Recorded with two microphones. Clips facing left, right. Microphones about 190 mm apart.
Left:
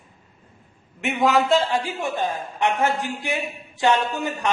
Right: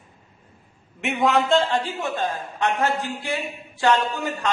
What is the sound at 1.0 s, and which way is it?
A man's voice, centre (ahead or behind).